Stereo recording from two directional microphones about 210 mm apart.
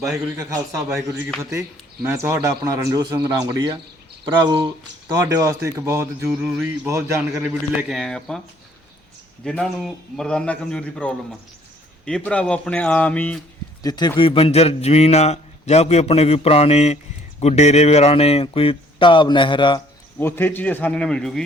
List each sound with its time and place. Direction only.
0.0 s speech: 15° right (ahead or behind); by 8.4 s centre (ahead or behind)
9.4 s a man's voice: 5° left (ahead or behind)
13.8 s a man's voice: 20° left (ahead or behind)
20.1 s a man's voice: 10° left (ahead or behind)